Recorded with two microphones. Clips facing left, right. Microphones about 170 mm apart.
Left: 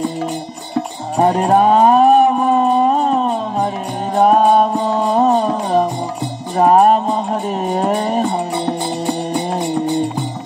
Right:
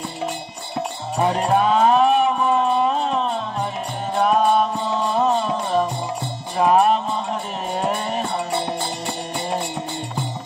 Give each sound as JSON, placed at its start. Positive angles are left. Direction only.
{"t": 1.1, "sound": "music", "side_deg": 40}